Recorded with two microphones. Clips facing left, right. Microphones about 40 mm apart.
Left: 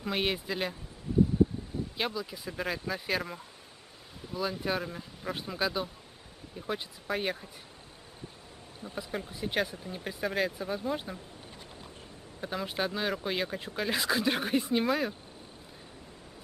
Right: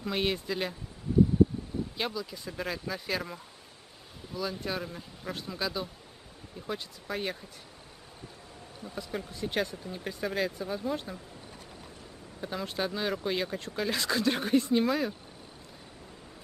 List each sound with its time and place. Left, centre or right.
0.0 s speech: centre
2.0 s speech: centre
5.3 s speech: centre
8.8 s speech: centre
12.4 s speech: centre